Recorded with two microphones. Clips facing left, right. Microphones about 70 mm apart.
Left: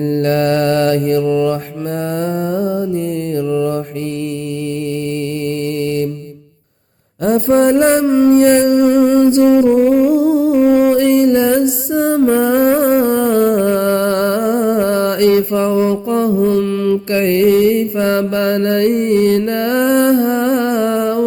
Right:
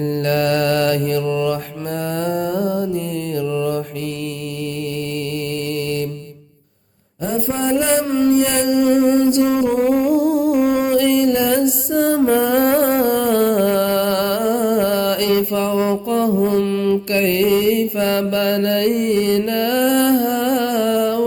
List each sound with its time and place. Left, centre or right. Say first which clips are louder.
0.1 s music: left 4 dB; left
1.2 s music: left 5 dB; centre
2.2 s mantra: left 1 dB; left
7.3 s music: left 8 dB; left
8.0 s mantra: left 6 dB; centre
8.3 s mantra: left 8 dB; left
10.1 s humming: left 3 dB; centre
10.6 s music: left 5 dB; left
11.9 s music: left 2 dB; centre
16.4 s mantra: left 3 dB; centre
17.1 s mantra: left 6 dB; left
19.5 s music: left 3 dB; left